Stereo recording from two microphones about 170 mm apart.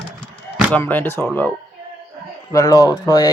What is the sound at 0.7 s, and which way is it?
Speech, 10° left (ahead or behind).